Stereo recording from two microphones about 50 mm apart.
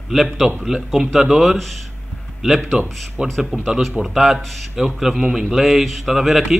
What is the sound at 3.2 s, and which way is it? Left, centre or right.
A man's voice, centre.